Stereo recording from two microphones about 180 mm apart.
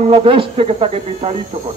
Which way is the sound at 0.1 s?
30° right (ahead or behind).